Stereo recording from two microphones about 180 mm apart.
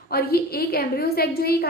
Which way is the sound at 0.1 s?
60° left (ahead or behind).